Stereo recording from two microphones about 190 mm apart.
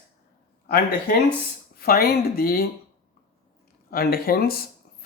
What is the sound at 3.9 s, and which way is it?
Speech, 50° left (ahead or behind).